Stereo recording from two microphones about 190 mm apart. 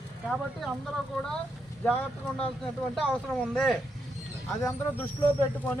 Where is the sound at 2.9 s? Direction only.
5° left (ahead or behind).